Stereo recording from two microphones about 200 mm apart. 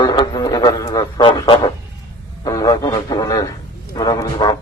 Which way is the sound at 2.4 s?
20° left (ahead or behind).